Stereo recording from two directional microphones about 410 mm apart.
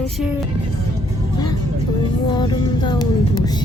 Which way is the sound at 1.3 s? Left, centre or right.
Centre.